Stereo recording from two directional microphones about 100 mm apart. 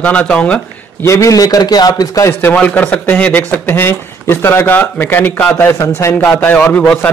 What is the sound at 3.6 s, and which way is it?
A man's voice, 25° left (ahead or behind).